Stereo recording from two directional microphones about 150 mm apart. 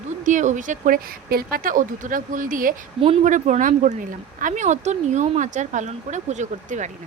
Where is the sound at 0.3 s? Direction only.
55° right (ahead or behind).